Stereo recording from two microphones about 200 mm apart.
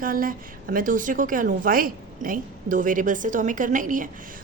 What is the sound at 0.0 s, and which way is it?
A woman's voice, 45° right (ahead or behind).